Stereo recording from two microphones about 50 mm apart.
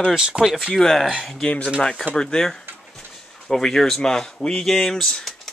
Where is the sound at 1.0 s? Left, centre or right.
Centre.